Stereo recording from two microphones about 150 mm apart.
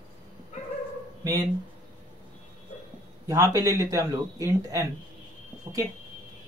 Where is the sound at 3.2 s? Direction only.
20° right (ahead or behind).